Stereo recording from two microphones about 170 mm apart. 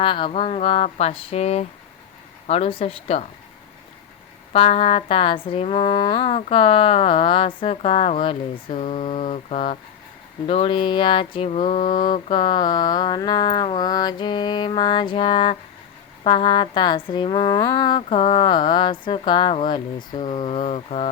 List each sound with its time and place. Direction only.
0.0 s speech: 30° left (ahead or behind)
4.5 s speech: 35° left (ahead or behind); by 12.2 s 50° left (ahead or behind)
12.3 s a woman's voice: 30° left (ahead or behind)